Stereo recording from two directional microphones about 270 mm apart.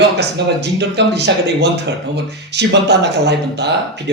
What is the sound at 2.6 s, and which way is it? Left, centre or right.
A man's voice, right.